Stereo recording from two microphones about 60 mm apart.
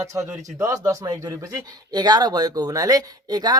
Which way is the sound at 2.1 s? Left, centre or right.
Right.